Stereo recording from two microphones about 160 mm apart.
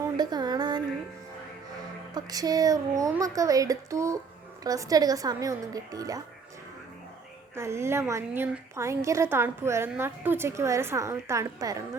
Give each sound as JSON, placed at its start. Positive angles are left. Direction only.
{"t": 0.0, "sound": "a sound", "side_deg": -25}
{"t": 2.1, "sound": "speech", "side_deg": -25}
{"t": 7.5, "sound": "a woman's voice", "side_deg": -15}